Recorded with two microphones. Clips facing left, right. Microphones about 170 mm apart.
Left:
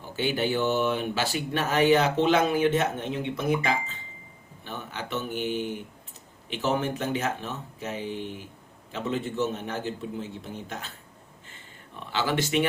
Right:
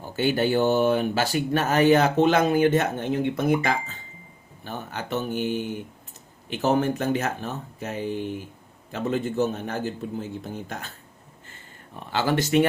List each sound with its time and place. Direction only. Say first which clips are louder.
0.2 s speech: right 4 dB; 45° right (ahead or behind)
11.9 s speech: right 3 dB; 45° right (ahead or behind)